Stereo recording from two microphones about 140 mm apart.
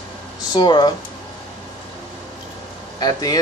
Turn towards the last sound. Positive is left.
turn(degrees=30)  # may be behind; listen again after turning